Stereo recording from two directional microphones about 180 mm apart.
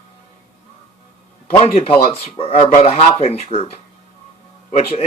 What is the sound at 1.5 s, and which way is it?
Speech, 35° left (ahead or behind).